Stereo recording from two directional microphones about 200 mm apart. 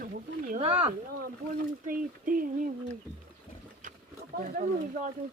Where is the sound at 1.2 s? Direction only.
45° right (ahead or behind).